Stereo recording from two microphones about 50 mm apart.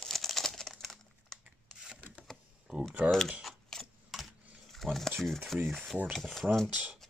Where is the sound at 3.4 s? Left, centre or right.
Centre.